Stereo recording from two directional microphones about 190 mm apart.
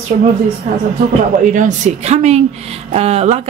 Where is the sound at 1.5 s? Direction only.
40° right (ahead or behind).